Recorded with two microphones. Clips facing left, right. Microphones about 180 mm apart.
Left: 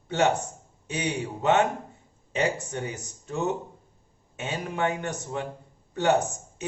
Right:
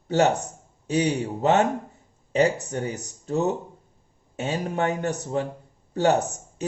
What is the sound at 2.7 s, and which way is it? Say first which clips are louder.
Speech: right 4 dB; 35° right (ahead or behind).